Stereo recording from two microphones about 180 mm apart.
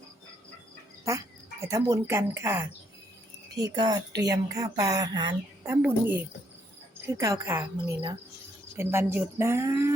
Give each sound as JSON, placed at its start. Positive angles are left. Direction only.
{"t": 1.6, "sound": "speech", "side_deg": -15}
{"t": 5.6, "sound": "speech", "side_deg": -10}